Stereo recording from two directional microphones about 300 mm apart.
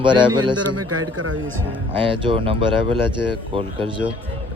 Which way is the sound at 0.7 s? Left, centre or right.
Right.